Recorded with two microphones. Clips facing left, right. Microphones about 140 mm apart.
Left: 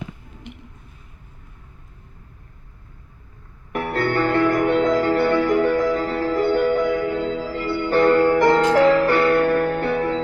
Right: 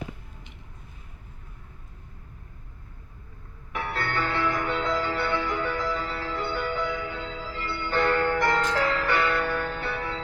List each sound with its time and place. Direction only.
3.7 s music: 55° left (ahead or behind)
8.5 s music: 65° left (ahead or behind); by 9.4 s 45° left (ahead or behind)
9.4 s music: 60° left (ahead or behind)